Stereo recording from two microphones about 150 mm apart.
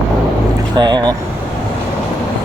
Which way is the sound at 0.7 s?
25° right (ahead or behind).